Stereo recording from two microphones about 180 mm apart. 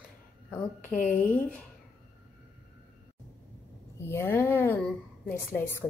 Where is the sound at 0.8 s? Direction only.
45° left (ahead or behind).